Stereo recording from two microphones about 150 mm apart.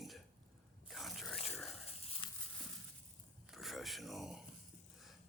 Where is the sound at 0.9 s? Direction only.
Centre (ahead or behind).